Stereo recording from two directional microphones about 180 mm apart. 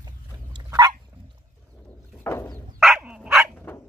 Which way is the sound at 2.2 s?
15° left (ahead or behind).